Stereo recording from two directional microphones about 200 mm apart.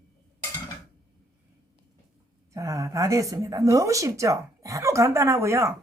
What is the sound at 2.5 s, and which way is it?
A woman's voice, 15° right (ahead or behind).